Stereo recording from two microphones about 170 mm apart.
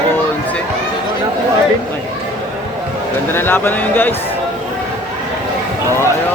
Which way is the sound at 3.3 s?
15° left (ahead or behind).